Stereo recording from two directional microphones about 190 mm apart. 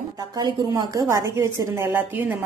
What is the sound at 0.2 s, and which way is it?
A woman's voice, 20° right (ahead or behind).